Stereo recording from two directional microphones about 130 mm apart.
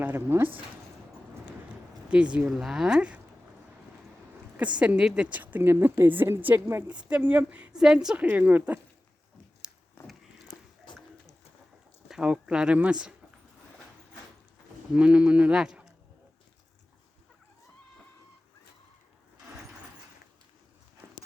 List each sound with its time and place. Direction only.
0.0 s a woman's voice: 15° right (ahead or behind)
2.3 s speech: 5° right (ahead or behind)
4.8 s a woman's voice: 5° right (ahead or behind)
10.1 s a sound: centre (ahead or behind)
10.9 s bird: 35° left (ahead or behind)
12.0 s a woman's voice: 5° right (ahead or behind)
14.9 s a woman's voice: 10° right (ahead or behind)